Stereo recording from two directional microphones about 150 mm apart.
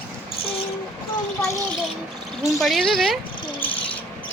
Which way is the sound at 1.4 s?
20° left (ahead or behind).